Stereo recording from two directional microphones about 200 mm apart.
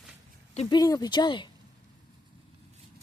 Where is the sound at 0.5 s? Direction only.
20° left (ahead or behind).